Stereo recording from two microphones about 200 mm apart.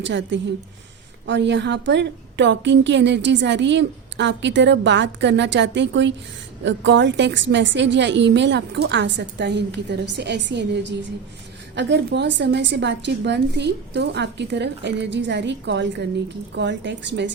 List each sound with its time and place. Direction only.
0.0 s a woman's voice: 65° right (ahead or behind)